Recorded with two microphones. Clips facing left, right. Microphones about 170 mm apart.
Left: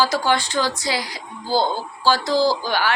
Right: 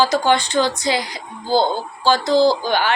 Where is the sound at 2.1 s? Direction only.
10° left (ahead or behind).